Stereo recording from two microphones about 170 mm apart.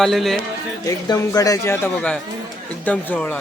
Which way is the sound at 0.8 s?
20° left (ahead or behind).